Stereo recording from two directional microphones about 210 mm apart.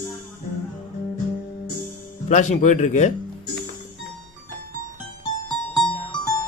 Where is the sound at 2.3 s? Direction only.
35° left (ahead or behind).